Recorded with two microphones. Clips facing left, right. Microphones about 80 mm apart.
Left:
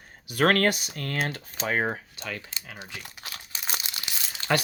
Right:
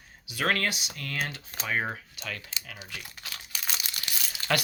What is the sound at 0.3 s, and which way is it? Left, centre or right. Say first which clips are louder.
Speech: left 6 dB; left.